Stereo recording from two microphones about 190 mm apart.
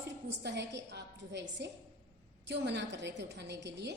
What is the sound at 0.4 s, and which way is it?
A woman's voice, 65° right (ahead or behind).